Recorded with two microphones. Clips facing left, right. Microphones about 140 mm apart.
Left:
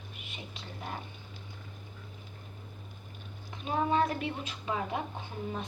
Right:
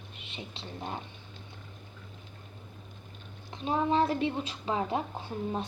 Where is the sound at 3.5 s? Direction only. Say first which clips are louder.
Right 2 dB; 30° right (ahead or behind).